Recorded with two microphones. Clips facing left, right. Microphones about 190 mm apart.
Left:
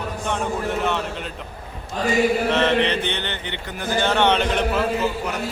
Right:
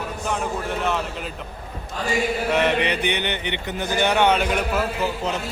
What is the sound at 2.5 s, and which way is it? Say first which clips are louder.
Mantra: left 1 dB; 15° right (ahead or behind).